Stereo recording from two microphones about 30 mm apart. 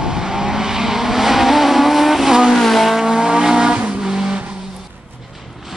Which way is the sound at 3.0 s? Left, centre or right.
Centre.